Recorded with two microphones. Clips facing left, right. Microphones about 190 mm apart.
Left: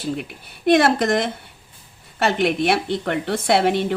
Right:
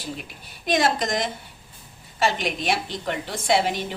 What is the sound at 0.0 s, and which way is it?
A woman's voice, 60° left (ahead or behind).